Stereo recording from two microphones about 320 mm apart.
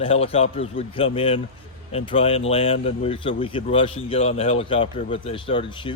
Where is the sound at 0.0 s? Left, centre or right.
Centre.